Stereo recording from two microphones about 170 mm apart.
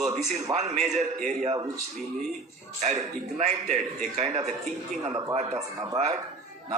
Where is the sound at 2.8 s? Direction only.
40° right (ahead or behind).